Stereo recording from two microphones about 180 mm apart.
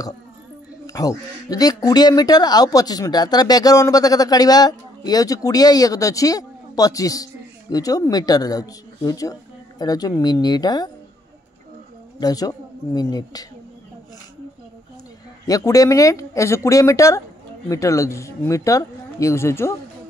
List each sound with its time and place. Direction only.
0.8 s speech: 20° left (ahead or behind)
12.2 s speech: 20° left (ahead or behind)
15.4 s speech: 20° left (ahead or behind)